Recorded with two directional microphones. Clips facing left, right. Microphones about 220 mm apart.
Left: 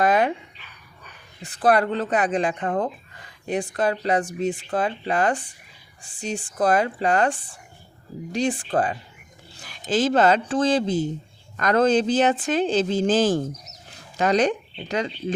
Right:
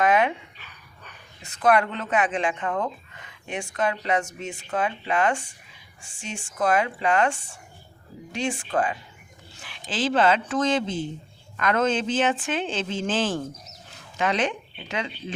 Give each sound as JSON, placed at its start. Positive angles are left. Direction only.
{"t": 0.0, "sound": "dog", "side_deg": 35}
{"t": 1.4, "sound": "speech", "side_deg": 35}